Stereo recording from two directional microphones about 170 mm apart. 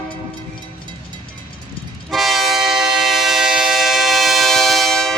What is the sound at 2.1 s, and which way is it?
Train, centre (ahead or behind).